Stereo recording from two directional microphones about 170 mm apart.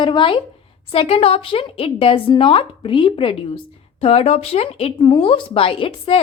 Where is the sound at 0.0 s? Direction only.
30° left (ahead or behind).